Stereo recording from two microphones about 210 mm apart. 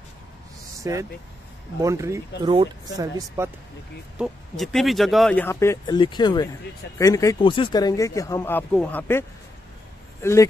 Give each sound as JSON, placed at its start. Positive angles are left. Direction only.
{"t": 0.7, "sound": "speech", "side_deg": -15}
{"t": 4.2, "sound": "speech", "side_deg": 0}
{"t": 10.2, "sound": "speech", "side_deg": 15}